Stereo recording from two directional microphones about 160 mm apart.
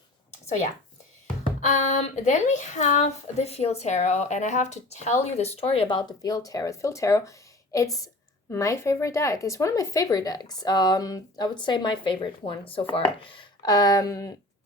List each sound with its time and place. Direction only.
0.4 s a woman's voice: 45° left (ahead or behind); by 14.3 s 20° left (ahead or behind)